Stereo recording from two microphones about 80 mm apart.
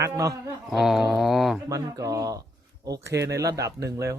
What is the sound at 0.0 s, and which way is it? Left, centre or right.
Speech, right.